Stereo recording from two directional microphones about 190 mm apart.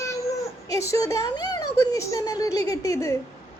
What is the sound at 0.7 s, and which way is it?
A woman's voice, 15° left (ahead or behind).